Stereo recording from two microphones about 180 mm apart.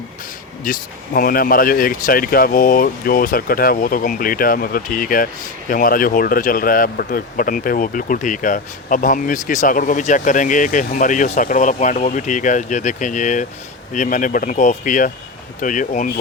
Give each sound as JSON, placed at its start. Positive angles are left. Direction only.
{"t": 0.6, "sound": "speech", "side_deg": 50}